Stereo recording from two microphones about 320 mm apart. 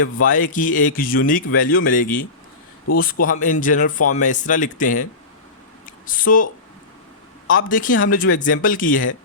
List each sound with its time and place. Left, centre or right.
0.2 s speech: left
6.1 s speech: left
7.5 s speech: left